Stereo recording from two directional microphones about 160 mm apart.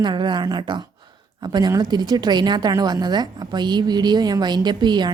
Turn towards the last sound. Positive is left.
turn(degrees=-25)  # may be behind; listen again after turning